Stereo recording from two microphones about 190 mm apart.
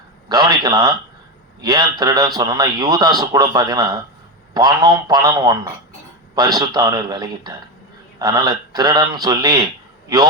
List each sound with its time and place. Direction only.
0.3 s a man's voice: 20° right (ahead or behind)